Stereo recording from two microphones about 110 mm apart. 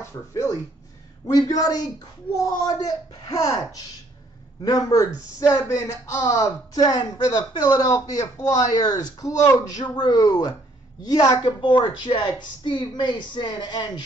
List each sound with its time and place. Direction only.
0.0 s speech: 30° left (ahead or behind)